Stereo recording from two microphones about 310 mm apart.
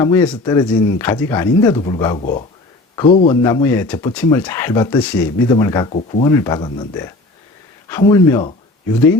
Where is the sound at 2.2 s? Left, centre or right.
Left.